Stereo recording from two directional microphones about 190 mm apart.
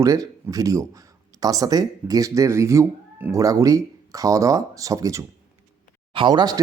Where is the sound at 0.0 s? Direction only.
15° right (ahead or behind).